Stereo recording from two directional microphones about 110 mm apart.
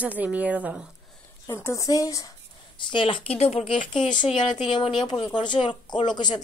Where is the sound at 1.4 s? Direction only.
25° left (ahead or behind).